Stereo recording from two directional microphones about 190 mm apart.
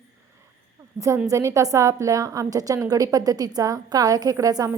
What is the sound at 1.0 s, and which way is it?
A woman's voice, 15° right (ahead or behind).